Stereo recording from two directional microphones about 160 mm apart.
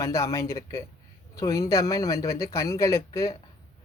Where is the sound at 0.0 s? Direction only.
20° left (ahead or behind).